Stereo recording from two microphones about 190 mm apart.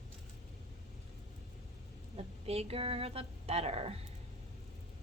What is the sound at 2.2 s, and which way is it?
A woman's voice, 30° right (ahead or behind).